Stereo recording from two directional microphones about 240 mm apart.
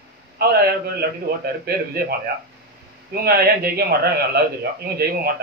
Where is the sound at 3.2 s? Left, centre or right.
Right.